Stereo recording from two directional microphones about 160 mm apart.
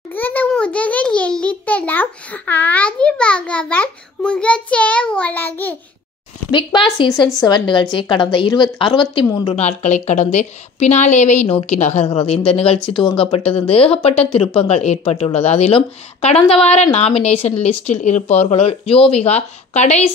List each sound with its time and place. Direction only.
0.1 s a sound: 10° left (ahead or behind)
7.1 s speech: centre (ahead or behind)
7.3 s a woman's voice: 25° left (ahead or behind)
9.6 s a woman's voice: 45° left (ahead or behind)